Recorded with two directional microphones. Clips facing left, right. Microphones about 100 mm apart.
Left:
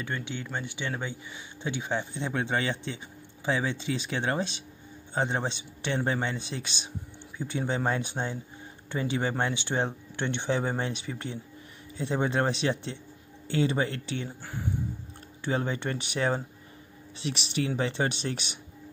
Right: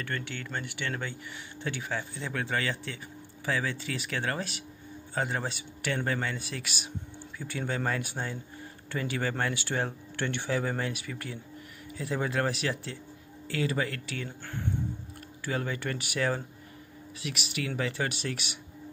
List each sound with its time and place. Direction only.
0.0 s speech: 15° left (ahead or behind)
15.4 s speech: 25° left (ahead or behind)